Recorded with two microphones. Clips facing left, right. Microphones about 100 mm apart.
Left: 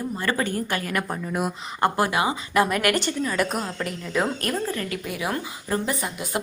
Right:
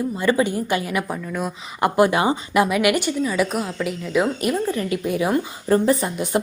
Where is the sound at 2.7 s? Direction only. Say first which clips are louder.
Right 4 dB; 10° right (ahead or behind); by 6.2 s 30° right (ahead or behind).